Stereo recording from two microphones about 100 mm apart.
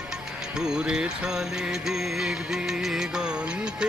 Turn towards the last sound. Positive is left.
turn(degrees=-10)  # may be behind; listen again after turning